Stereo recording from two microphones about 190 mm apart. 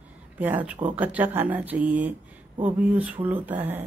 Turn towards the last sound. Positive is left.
turn(degrees=-10)  # may be behind; listen again after turning